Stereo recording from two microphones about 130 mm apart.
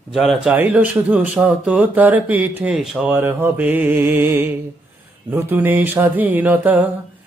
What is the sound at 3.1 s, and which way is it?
Speech, 15° right (ahead or behind).